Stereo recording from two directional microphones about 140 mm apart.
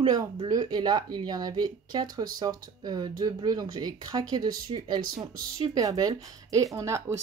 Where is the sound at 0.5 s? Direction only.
30° right (ahead or behind).